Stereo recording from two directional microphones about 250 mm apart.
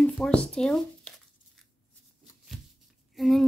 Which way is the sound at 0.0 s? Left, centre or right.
Centre.